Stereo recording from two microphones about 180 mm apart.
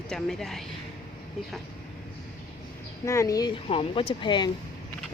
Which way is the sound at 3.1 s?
20° left (ahead or behind).